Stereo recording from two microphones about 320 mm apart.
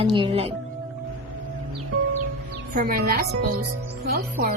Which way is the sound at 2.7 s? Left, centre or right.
Right.